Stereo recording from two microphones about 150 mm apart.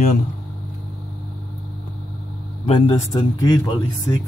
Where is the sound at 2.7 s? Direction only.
40° left (ahead or behind).